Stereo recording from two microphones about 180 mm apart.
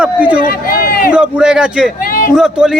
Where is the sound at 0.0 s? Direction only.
5° right (ahead or behind).